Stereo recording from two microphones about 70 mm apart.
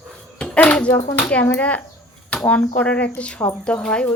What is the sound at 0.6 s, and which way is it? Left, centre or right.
A child's voice, centre.